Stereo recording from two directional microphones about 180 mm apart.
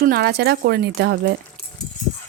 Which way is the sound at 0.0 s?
60° right (ahead or behind).